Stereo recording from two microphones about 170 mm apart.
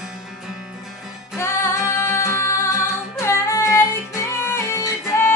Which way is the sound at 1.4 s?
15° left (ahead or behind).